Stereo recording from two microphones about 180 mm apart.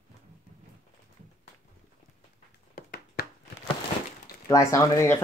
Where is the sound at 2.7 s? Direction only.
55° left (ahead or behind).